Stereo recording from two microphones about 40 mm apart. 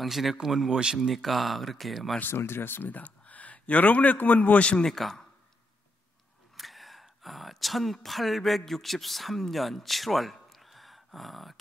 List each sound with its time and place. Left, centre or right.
0.0 s speech: centre
0.7 s speech: centre
0.9 s speech: centre
2.2 s speech: left
3.0 s a man's voice: left
4.6 s speech: left
4.8 s speech: centre
6.5 s speech: centre